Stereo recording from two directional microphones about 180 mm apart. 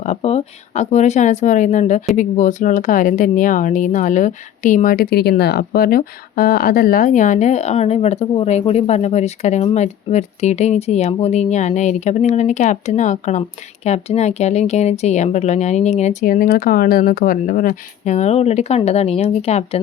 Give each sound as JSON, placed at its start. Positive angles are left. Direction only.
{"t": 0.0, "sound": "speech", "side_deg": 40}